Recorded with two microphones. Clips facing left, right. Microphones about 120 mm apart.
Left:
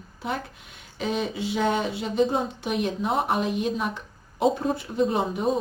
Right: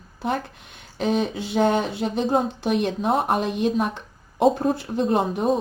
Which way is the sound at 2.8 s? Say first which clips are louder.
Right 2 dB; 35° right (ahead or behind).